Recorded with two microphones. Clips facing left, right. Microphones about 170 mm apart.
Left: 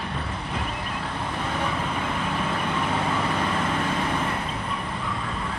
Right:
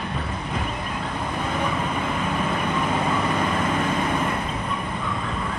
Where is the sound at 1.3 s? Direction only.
15° right (ahead or behind).